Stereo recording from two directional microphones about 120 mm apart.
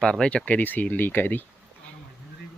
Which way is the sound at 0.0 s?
5° left (ahead or behind).